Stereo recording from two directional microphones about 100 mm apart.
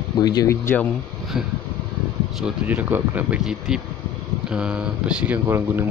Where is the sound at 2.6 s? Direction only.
15° right (ahead or behind).